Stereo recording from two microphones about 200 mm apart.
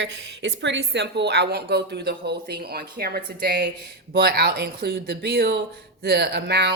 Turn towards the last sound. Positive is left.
turn(degrees=-55)  # may be behind; listen again after turning